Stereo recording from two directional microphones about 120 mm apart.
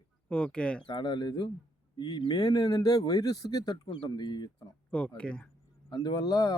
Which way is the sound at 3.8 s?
45° left (ahead or behind).